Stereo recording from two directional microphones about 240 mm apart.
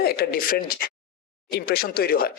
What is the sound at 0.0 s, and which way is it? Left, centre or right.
Speech, left.